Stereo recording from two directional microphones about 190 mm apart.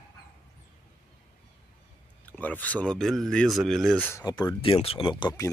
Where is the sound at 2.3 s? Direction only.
10° left (ahead or behind).